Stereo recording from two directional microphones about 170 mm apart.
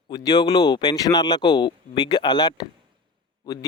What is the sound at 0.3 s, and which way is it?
Speech, 25° left (ahead or behind).